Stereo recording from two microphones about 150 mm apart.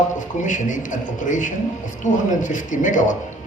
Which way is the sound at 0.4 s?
55° left (ahead or behind).